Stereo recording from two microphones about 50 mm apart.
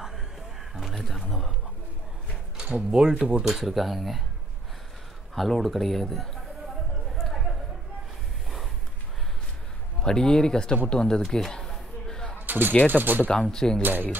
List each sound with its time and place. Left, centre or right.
0.7 s a sound: centre
2.5 s speech: centre
3.4 s a man's voice: centre
5.3 s a man's voice: centre
7.2 s chatter: centre
10.0 s speech: centre
10.9 s a sound: centre
12.4 s a sound: right
12.9 s speech: right
13.3 s speech: centre